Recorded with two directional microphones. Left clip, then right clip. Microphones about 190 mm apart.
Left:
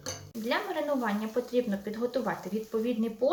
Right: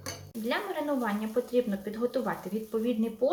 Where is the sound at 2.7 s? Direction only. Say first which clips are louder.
Right 1 dB; centre (ahead or behind).